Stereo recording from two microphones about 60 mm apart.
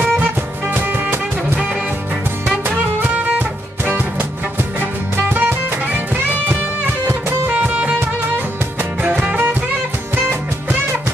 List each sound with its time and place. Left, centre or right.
0.7 s music: right
3.0 s music: right
7.5 s music: right
9.0 s music: right